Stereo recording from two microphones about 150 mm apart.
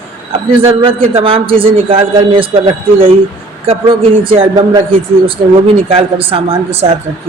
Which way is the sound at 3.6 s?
35° right (ahead or behind).